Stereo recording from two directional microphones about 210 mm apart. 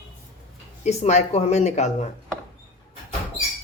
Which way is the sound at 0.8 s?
30° left (ahead or behind).